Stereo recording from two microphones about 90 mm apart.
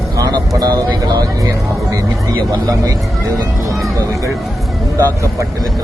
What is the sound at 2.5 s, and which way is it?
Speech, 40° right (ahead or behind).